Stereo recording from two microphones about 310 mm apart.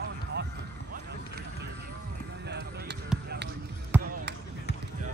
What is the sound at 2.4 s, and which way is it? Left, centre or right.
Music, right.